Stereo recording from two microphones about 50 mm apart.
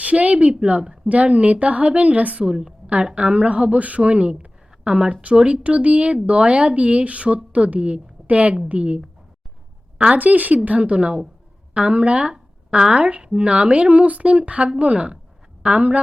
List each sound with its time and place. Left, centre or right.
0.0 s speech: right
2.4 s a woman's voice: centre
2.8 s a woman's voice: right
10.2 s speech: right